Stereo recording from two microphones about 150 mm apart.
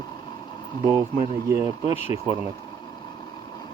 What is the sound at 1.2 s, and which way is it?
Speech, 20° right (ahead or behind).